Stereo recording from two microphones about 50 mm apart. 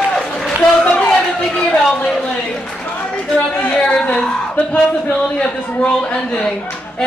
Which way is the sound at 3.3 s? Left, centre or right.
Left.